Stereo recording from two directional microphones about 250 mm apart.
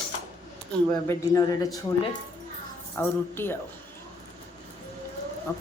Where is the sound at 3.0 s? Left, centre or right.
Centre.